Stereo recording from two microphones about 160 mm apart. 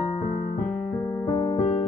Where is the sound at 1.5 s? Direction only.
35° left (ahead or behind).